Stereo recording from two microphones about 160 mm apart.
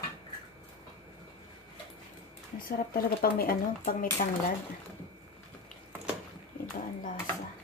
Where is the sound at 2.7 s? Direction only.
65° left (ahead or behind).